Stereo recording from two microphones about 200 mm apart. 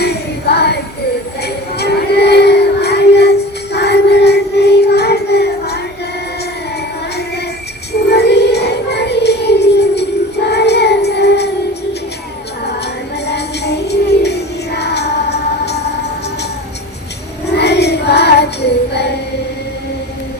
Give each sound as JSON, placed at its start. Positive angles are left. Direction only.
{"t": 0.0, "sound": "music", "side_deg": 55}
{"t": 1.8, "sound": "child singing", "side_deg": 55}
{"t": 8.0, "sound": "music", "side_deg": 55}
{"t": 13.2, "sound": "music", "side_deg": 55}
{"t": 17.4, "sound": "child singing", "side_deg": 55}